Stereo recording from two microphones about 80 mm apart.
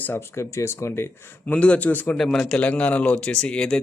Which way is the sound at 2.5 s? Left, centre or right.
Centre.